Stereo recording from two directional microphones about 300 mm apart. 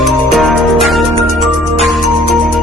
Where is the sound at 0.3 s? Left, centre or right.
Centre.